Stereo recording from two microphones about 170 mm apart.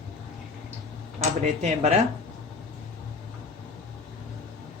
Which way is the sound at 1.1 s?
40° right (ahead or behind).